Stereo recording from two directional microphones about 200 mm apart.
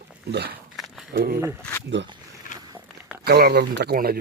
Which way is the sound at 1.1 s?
50° right (ahead or behind).